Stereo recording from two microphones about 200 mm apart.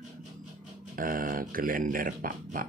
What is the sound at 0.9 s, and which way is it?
Speech, 45° right (ahead or behind).